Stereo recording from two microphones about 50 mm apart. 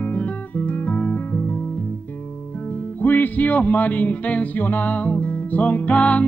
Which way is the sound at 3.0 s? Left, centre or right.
Left.